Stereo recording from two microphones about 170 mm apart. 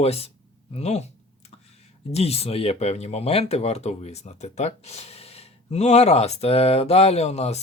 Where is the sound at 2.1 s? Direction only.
40° left (ahead or behind).